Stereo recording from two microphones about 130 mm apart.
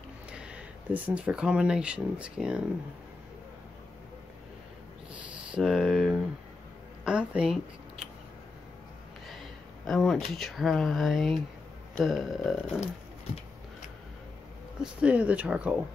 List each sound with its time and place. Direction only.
0.3 s speech: 10° right (ahead or behind)
5.1 s a sound: 5° right (ahead or behind)
7.1 s speech: 10° right (ahead or behind)
9.3 s speech: centre (ahead or behind)
12.0 s a sound: centre (ahead or behind)
14.8 s speech: 10° right (ahead or behind)